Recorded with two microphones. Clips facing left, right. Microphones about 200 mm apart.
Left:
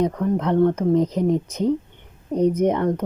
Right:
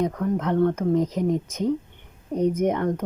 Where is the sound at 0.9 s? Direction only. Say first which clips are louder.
Left 3 dB; 65° left (ahead or behind).